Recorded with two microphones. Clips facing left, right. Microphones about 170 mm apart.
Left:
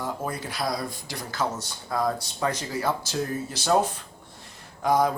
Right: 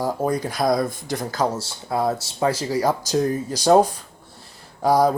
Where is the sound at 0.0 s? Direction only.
35° right (ahead or behind).